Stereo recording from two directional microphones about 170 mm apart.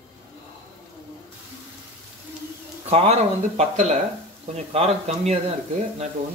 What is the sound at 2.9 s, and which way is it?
Speech, 40° right (ahead or behind).